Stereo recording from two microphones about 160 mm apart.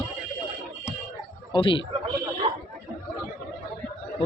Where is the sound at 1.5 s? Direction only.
30° left (ahead or behind).